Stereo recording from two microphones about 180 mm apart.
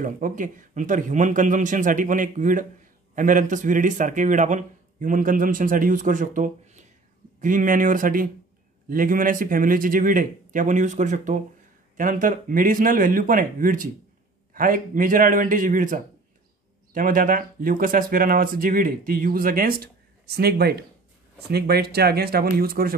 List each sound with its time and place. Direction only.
0.0 s speech: 45° right (ahead or behind)